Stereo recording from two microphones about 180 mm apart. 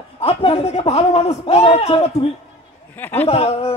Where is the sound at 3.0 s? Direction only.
10° left (ahead or behind).